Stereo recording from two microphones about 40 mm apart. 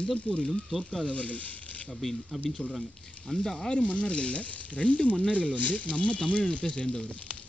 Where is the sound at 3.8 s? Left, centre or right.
Left.